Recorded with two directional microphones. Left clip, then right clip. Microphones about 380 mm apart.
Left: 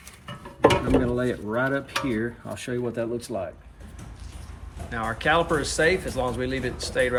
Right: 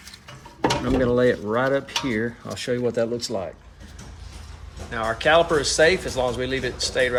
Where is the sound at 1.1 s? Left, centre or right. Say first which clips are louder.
Right 6 dB; centre.